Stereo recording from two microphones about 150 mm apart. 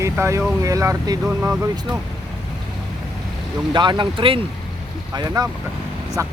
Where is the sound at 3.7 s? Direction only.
30° right (ahead or behind).